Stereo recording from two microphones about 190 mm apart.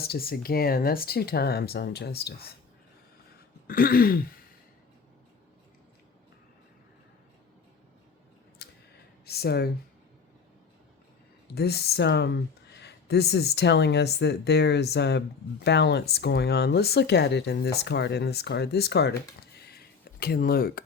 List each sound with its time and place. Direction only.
0.0 s speech: 55° left (ahead or behind)
3.7 s throat clearing: 50° left (ahead or behind)
8.6 s a sound: 60° left (ahead or behind)
9.2 s speech: 55° left (ahead or behind)
11.5 s speech: 60° left (ahead or behind)
19.7 s a sound: 55° left (ahead or behind)